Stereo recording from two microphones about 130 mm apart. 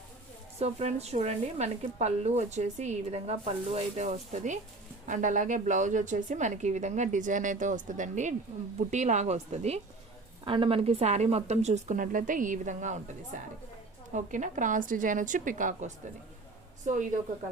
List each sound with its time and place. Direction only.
0.6 s a woman's voice: 55° right (ahead or behind)
10.4 s speech: 40° right (ahead or behind); by 13.0 s 70° right (ahead or behind)
14.1 s a woman's voice: 75° right (ahead or behind)